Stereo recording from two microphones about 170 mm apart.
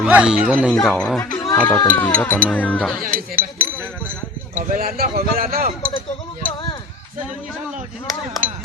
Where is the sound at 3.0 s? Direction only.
55° right (ahead or behind).